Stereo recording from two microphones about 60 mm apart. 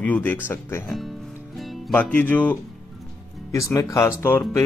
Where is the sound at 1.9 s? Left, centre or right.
Left.